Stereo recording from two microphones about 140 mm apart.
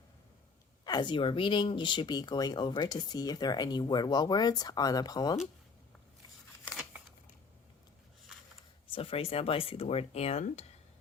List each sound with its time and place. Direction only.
0.9 s speech: 30° left (ahead or behind)
8.9 s speech: 45° left (ahead or behind)